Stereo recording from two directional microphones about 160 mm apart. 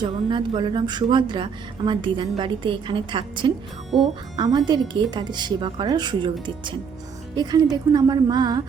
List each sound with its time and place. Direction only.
0.0 s speech: 30° right (ahead or behind)
7.3 s speech: 25° right (ahead or behind)